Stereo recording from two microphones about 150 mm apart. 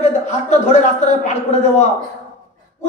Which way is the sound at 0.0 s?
50° left (ahead or behind).